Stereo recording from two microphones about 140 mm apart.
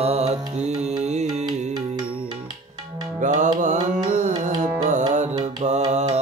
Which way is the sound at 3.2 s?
65° right (ahead or behind).